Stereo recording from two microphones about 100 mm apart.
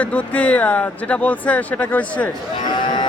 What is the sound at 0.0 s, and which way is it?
Speech, 15° left (ahead or behind).